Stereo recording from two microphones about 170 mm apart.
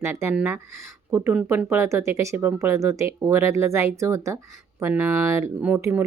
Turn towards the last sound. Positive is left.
turn(degrees=-10)  # may be behind; listen again after turning